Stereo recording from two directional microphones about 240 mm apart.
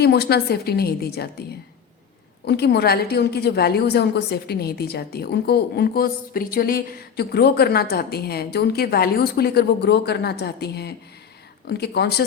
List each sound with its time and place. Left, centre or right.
0.0 s a woman's voice: left